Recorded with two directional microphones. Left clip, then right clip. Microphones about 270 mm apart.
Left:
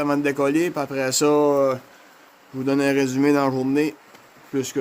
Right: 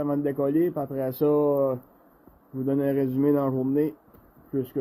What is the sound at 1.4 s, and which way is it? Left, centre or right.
Speech, left.